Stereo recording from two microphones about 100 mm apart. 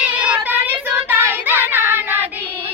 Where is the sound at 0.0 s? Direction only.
10° right (ahead or behind).